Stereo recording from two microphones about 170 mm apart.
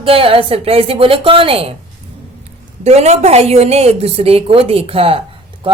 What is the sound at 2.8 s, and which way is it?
A woman's voice, 40° right (ahead or behind).